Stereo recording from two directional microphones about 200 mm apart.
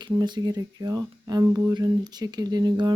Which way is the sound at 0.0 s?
20° right (ahead or behind).